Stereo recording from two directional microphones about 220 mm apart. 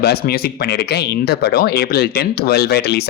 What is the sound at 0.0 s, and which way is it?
Speech, 45° left (ahead or behind).